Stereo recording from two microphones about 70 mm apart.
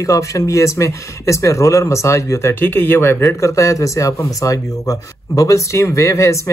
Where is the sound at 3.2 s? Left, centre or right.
Left.